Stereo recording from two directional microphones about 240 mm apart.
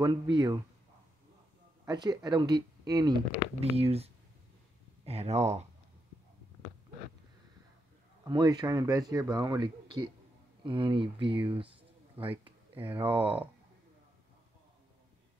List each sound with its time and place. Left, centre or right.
0.0 s speech: centre
1.9 s speech: centre
8.3 s speech: centre
12.7 s speech: centre
13.0 s speech: right